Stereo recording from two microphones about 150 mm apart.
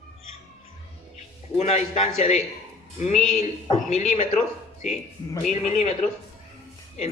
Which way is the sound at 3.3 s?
45° left (ahead or behind).